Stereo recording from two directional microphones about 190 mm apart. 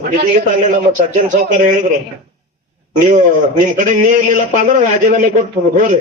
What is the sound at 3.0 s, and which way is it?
A man's voice, 40° right (ahead or behind).